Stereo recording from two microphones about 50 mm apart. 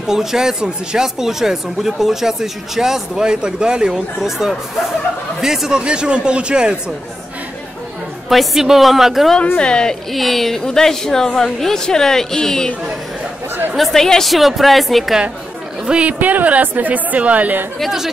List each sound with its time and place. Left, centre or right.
0.0 s speech: centre
5.8 s speech: centre
8.3 s a woman's voice: centre
9.6 s a woman's voice: centre
10.1 s a woman's voice: centre
13.7 s a woman's voice: centre
15.9 s speech: right